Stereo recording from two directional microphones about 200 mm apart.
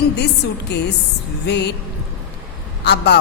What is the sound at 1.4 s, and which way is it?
Speech, 60° left (ahead or behind).